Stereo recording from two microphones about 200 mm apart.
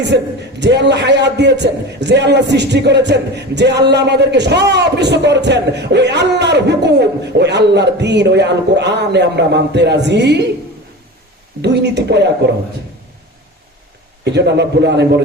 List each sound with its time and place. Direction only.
0.1 s a man's voice: 55° right (ahead or behind)
11.6 s a man's voice: 60° right (ahead or behind)
14.3 s a man's voice: 60° right (ahead or behind)